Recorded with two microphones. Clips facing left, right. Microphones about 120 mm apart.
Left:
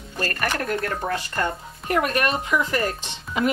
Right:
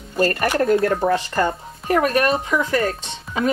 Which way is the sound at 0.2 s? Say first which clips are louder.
Right 8 dB; 30° right (ahead or behind).